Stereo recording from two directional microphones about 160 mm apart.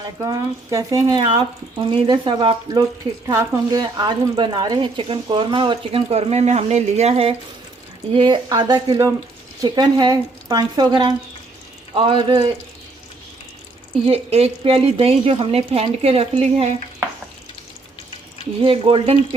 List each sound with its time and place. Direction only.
0.0 s speech: 25° right (ahead or behind)
1.2 s a woman's voice: 30° right (ahead or behind)
14.1 s a woman's voice: 40° right (ahead or behind)
18.6 s a woman's voice: 35° right (ahead or behind)